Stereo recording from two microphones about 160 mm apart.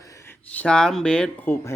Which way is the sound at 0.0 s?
20° left (ahead or behind).